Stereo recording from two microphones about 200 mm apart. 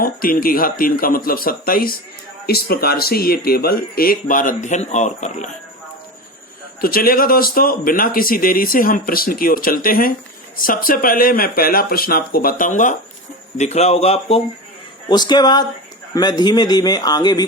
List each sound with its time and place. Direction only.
0.0 s speech: 45° left (ahead or behind)
6.8 s a man's voice: 45° left (ahead or behind); by 17.4 s 20° left (ahead or behind)